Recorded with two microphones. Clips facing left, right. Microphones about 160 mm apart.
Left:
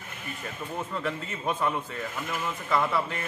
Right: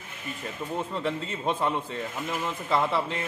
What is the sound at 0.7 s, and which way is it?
Speech, 25° right (ahead or behind).